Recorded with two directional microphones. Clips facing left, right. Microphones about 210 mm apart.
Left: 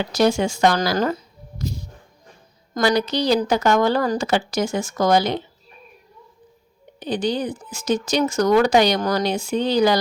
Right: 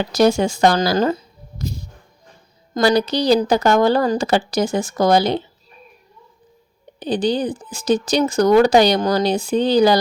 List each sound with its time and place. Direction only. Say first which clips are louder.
0.1 s speech: right 3 dB; 40° right (ahead or behind)
0.8 s speech: right 3 dB; 25° right (ahead or behind)
2.7 s speech: right 3 dB; 35° right (ahead or behind)
7.0 s speech: right 3 dB; 30° right (ahead or behind)